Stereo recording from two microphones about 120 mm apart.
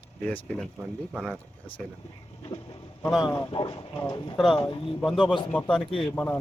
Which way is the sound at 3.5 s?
45° left (ahead or behind).